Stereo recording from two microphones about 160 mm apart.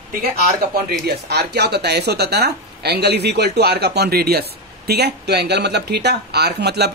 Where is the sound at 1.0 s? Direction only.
90° right.